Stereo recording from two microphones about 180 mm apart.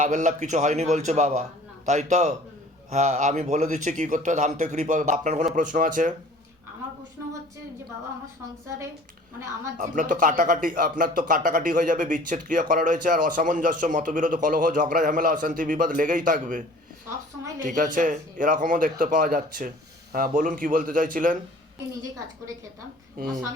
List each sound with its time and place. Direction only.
0.0 s a man's voice: 45° right (ahead or behind)
9.7 s a man's voice: 45° right (ahead or behind)
23.1 s speech: 50° right (ahead or behind)